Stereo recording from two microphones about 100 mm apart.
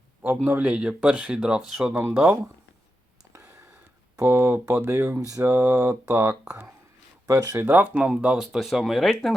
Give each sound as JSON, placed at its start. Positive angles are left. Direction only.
{"t": 0.4, "sound": "speech", "side_deg": -15}
{"t": 1.9, "sound": "speech", "side_deg": -20}
{"t": 4.2, "sound": "speech", "side_deg": -25}
{"t": 7.3, "sound": "speech", "side_deg": -35}
{"t": 7.7, "sound": "speech", "side_deg": -20}